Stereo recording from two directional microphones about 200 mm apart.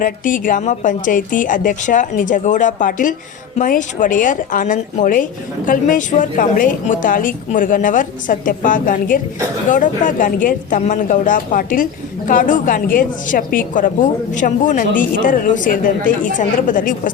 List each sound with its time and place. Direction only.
0.0 s speech: 40° left (ahead or behind)